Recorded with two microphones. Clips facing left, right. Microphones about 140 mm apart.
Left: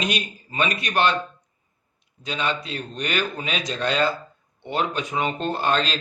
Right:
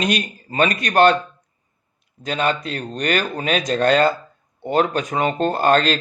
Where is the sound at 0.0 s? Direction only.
45° right (ahead or behind).